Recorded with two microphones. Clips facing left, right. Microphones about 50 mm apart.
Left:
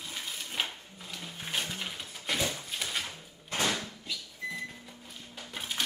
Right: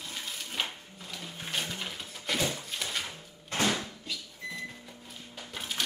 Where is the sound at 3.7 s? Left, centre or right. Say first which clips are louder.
Right 1 dB; centre.